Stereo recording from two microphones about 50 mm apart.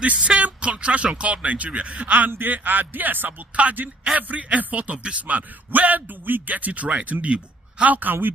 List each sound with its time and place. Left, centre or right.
0.0 s speech: right
7.9 s speech: right